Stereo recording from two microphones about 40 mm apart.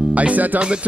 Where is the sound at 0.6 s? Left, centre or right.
Right.